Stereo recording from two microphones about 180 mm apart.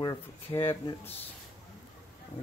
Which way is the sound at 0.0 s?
15° left (ahead or behind).